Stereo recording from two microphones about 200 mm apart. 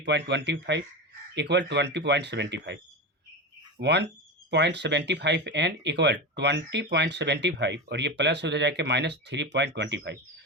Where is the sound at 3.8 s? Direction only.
60° right (ahead or behind).